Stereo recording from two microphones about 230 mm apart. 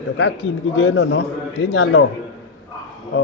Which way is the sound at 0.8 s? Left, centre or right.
Left.